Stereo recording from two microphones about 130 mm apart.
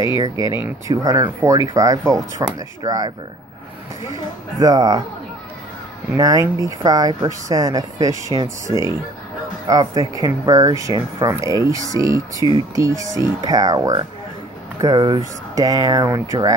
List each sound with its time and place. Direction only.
0.8 s speech: 25° right (ahead or behind)
6.1 s speech: 30° right (ahead or behind)